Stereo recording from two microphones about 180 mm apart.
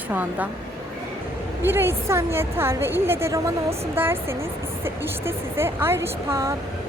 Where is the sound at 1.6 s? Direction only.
15° right (ahead or behind).